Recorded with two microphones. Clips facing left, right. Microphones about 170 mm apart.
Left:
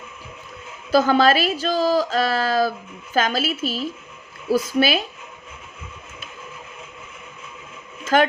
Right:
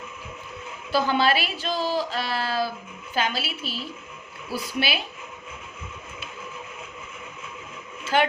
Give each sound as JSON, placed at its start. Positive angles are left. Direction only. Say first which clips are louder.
{"t": 0.9, "sound": "a woman's voice", "louder": "left 6 dB", "side_deg": 40}
{"t": 8.0, "sound": "speech", "louder": "left 5 dB", "side_deg": 45}